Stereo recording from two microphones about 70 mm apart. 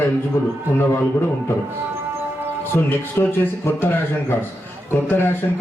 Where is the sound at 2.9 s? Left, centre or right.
Left.